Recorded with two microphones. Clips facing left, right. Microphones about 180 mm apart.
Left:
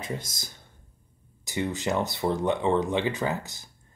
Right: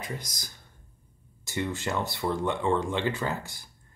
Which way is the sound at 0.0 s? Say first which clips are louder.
Left 3 dB; 25° left (ahead or behind).